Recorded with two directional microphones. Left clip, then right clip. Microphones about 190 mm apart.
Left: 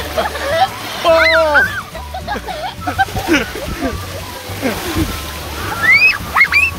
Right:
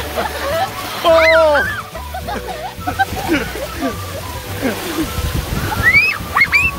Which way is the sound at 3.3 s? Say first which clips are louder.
Left 6 dB; 20° left (ahead or behind).